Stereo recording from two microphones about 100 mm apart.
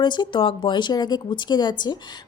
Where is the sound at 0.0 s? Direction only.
50° left (ahead or behind).